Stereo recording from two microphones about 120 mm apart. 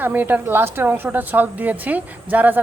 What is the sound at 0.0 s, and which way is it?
Speech, 15° right (ahead or behind).